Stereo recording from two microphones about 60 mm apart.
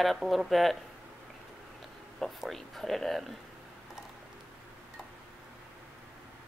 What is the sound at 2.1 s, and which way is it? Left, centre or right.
Speech, centre.